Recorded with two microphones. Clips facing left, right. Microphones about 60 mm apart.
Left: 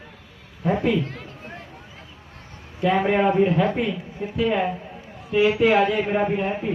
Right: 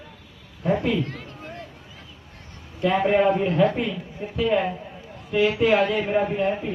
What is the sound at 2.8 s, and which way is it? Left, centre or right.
A man's voice, centre.